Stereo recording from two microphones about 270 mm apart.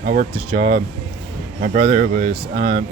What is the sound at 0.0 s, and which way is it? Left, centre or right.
Speech, right.